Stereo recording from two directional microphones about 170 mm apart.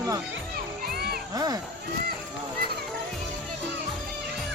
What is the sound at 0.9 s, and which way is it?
Music, 65° right (ahead or behind).